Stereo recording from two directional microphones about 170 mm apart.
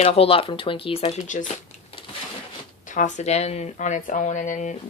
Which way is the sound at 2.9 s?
45° left (ahead or behind).